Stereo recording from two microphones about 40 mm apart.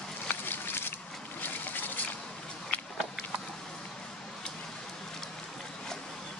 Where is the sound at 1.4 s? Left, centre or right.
Left.